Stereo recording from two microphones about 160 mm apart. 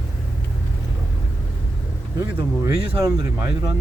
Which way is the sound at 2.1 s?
15° right (ahead or behind).